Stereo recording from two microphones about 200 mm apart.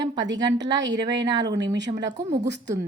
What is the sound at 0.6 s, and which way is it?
Speech, 65° right (ahead or behind).